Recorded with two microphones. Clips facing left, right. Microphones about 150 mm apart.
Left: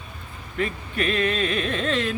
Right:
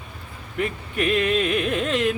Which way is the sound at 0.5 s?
10° right (ahead or behind).